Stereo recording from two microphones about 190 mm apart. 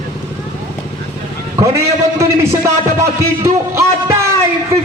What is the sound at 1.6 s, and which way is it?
Music, 15° right (ahead or behind).